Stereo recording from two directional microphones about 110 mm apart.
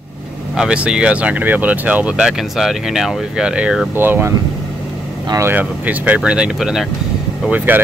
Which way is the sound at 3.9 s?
20° right (ahead or behind).